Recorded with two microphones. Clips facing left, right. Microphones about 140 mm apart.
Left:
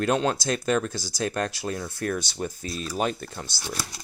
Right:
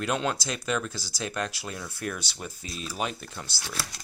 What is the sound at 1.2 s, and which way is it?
Speech, 45° left (ahead or behind).